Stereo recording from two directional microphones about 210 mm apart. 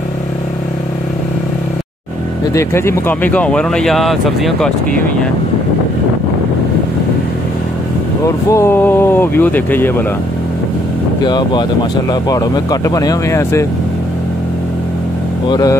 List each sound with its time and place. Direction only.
2.5 s speech: 10° left (ahead or behind)
8.5 s speech: 10° left (ahead or behind)
11.2 s speech: 20° left (ahead or behind)
15.4 s speech: 20° left (ahead or behind)